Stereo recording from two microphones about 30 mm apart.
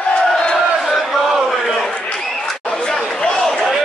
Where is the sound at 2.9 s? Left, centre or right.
Left.